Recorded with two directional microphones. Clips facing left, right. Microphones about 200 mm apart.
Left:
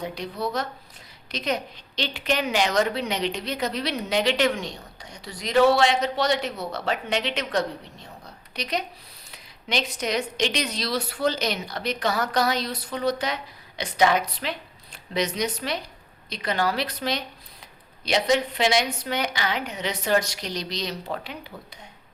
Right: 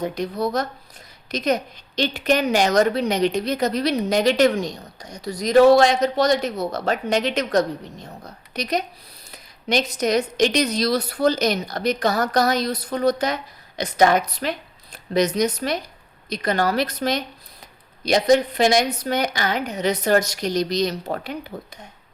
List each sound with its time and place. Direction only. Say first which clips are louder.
0.0 s a woman's voice: right 6 dB; 45° right (ahead or behind)